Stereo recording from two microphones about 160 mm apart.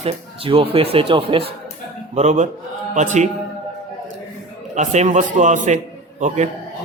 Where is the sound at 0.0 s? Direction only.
35° right (ahead or behind).